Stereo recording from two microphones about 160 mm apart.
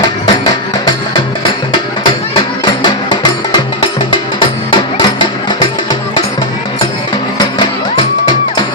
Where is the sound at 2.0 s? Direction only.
30° left (ahead or behind).